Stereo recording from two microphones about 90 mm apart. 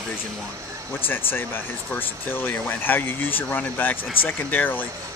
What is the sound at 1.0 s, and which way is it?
Speech, 25° left (ahead or behind).